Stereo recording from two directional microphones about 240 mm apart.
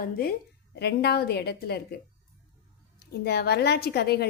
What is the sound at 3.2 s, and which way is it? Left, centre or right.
A woman's voice, left.